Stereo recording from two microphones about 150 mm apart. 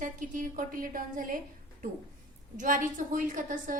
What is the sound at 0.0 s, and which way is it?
A woman's voice, 60° right (ahead or behind).